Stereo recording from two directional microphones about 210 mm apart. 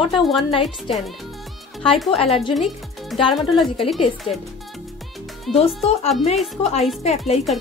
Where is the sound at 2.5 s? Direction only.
Centre (ahead or behind).